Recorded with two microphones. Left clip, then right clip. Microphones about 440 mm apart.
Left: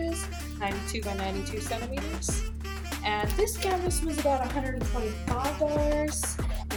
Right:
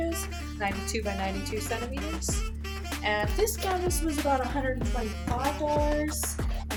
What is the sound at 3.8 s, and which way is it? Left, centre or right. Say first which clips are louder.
Music: even; centre.